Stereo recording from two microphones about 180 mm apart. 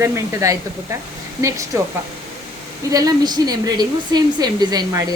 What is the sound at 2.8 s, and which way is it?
A woman's voice, 20° right (ahead or behind).